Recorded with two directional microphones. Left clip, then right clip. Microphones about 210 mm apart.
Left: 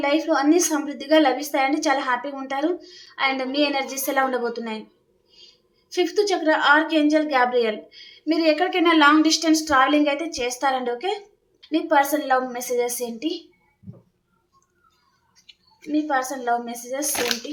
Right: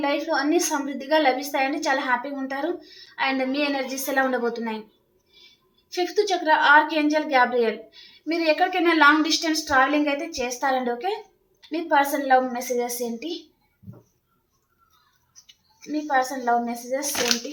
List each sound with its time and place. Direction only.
0.0 s a woman's voice: 25° left (ahead or behind)
5.9 s a woman's voice: 20° left (ahead or behind)
15.8 s a woman's voice: 15° left (ahead or behind)